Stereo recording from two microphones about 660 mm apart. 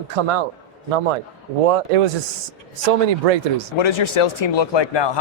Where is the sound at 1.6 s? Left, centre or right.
Right.